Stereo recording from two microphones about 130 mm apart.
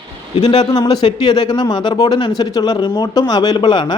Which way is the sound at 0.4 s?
30° left (ahead or behind).